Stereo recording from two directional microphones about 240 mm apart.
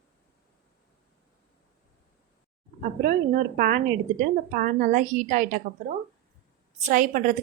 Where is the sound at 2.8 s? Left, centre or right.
Right.